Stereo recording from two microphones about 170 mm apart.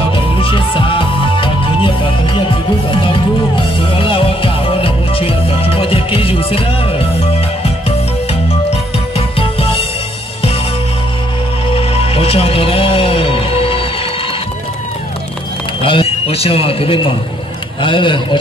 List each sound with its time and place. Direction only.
0.1 s music: 30° left (ahead or behind)
9.1 s music: 35° left (ahead or behind)
11.7 s music: 35° left (ahead or behind)
15.8 s a sound: 30° left (ahead or behind)
17.8 s a man's voice: 30° left (ahead or behind)